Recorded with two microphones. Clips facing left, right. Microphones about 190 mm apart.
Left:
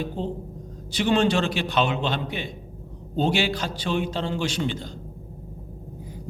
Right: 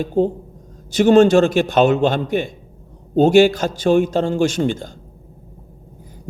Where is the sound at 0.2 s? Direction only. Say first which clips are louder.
Right 12 dB; 45° right (ahead or behind).